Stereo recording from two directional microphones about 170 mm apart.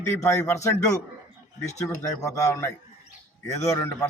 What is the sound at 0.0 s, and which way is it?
A man's voice, 15° left (ahead or behind).